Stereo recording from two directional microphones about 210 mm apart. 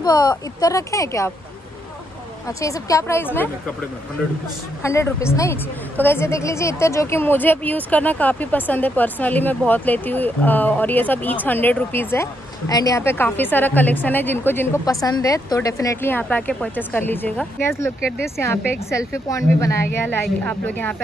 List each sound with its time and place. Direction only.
0.0 s a woman's voice: 20° left (ahead or behind)
2.4 s a woman's voice: 15° left (ahead or behind)
4.8 s a woman's voice: 15° left (ahead or behind)